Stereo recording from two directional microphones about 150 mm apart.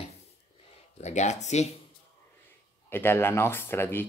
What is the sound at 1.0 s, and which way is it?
Speech, 50° left (ahead or behind).